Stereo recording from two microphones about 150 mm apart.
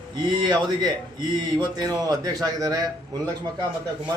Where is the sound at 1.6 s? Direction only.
25° right (ahead or behind).